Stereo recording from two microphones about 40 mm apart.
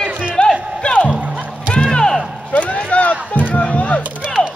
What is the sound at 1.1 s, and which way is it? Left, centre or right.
Music, right.